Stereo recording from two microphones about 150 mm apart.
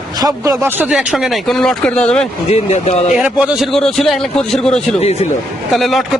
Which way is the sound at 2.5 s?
50° left (ahead or behind).